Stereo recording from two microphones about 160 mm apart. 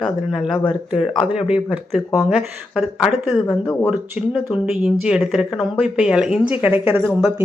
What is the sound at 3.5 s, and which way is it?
Speech, 10° left (ahead or behind).